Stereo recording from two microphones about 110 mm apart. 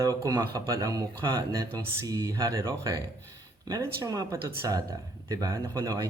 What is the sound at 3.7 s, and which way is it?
Mantra, 35° right (ahead or behind).